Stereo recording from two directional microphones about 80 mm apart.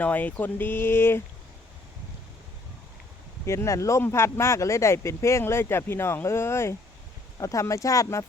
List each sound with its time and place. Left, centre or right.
0.0 s speech: centre
3.4 s speech: left